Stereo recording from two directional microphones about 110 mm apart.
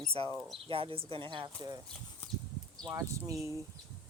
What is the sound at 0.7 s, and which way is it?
Speech, 55° right (ahead or behind).